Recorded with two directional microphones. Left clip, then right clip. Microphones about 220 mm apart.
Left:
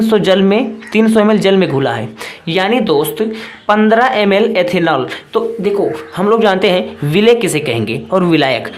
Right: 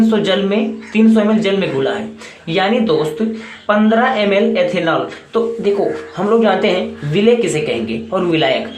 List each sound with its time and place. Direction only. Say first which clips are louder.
0.1 s speech: left 4 dB; 50° left (ahead or behind)
5.7 s speech: left 1 dB; 30° left (ahead or behind)
6.1 s speech: left 2 dB; 40° left (ahead or behind)